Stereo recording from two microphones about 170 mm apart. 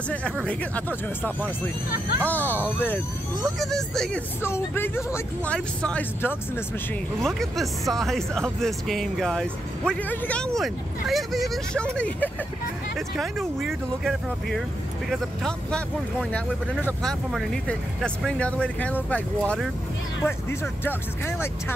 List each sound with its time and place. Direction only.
0.5 s speech: 10° left (ahead or behind)